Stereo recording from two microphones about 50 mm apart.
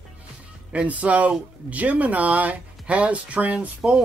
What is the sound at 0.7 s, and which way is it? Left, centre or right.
Speech, right.